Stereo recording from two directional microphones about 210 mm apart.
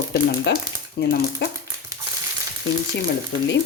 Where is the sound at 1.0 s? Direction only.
50° left (ahead or behind).